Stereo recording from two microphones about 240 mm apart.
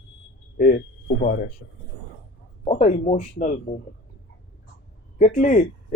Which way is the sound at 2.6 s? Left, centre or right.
Left.